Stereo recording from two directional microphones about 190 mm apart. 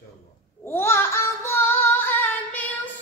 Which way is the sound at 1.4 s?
10° left (ahead or behind).